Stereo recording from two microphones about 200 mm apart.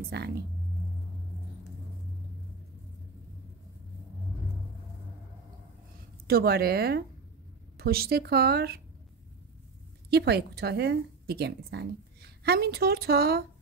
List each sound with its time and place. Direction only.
0.1 s speech: 55° right (ahead or behind)
6.2 s a woman's voice: 50° right (ahead or behind)
10.0 s a woman's voice: 55° right (ahead or behind)